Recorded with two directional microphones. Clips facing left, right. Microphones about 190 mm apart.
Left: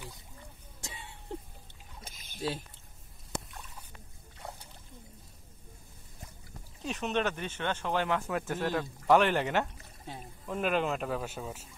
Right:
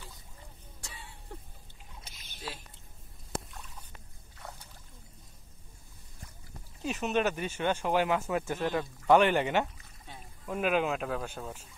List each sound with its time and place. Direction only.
0.7 s a sound: 20° left (ahead or behind)
2.1 s rowboat: 50° left (ahead or behind)
6.8 s speech: 5° right (ahead or behind)
9.8 s pour: 35° left (ahead or behind)
10.4 s speech: 5° right (ahead or behind)